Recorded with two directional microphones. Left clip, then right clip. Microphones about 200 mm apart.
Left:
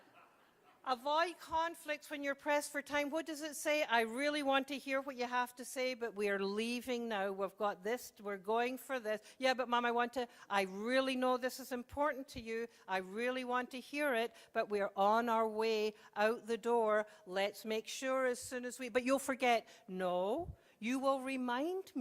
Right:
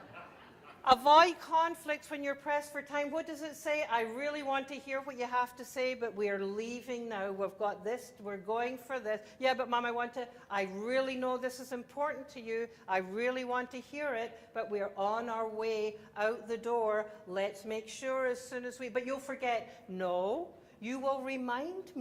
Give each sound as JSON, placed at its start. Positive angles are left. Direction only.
{"t": 0.9, "sound": "a woman's voice", "side_deg": 10}
{"t": 1.4, "sound": "a woman's voice", "side_deg": 30}
{"t": 5.1, "sound": "a woman's voice", "side_deg": 40}
{"t": 12.9, "sound": "speech", "side_deg": 35}
{"t": 20.0, "sound": "speech", "side_deg": 40}
{"t": 20.8, "sound": "a woman's voice", "side_deg": 60}